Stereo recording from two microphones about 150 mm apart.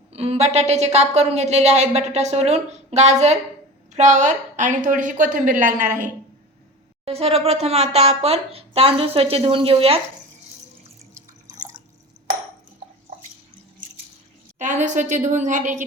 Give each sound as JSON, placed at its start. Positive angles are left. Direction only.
{"t": 0.1, "sound": "a woman's voice", "side_deg": -45}
{"t": 7.0, "sound": "speech", "side_deg": -40}
{"t": 11.4, "sound": "drip", "side_deg": -55}
{"t": 14.6, "sound": "a woman's voice", "side_deg": -55}